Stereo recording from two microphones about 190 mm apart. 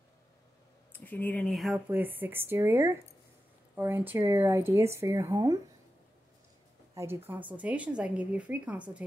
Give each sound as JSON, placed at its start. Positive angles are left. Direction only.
{"t": 0.9, "sound": "speech", "side_deg": 10}
{"t": 1.9, "sound": "speech", "side_deg": -10}
{"t": 7.0, "sound": "speech", "side_deg": -10}